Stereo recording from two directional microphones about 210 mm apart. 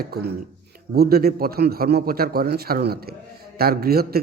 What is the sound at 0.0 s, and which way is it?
A man's voice, 50° right (ahead or behind).